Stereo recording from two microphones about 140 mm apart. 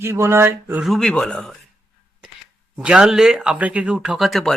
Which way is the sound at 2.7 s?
5° right (ahead or behind).